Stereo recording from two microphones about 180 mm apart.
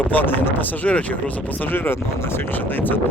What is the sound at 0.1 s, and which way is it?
Speech, 10° left (ahead or behind).